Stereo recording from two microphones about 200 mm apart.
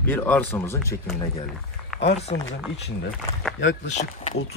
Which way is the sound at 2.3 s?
40° left (ahead or behind).